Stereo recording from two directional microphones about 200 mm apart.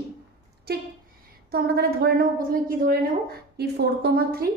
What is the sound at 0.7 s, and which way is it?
Speech, 50° right (ahead or behind).